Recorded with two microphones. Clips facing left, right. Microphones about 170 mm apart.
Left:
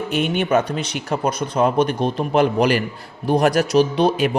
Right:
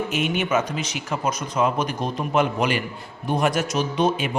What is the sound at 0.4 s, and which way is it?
Speech, 35° left (ahead or behind).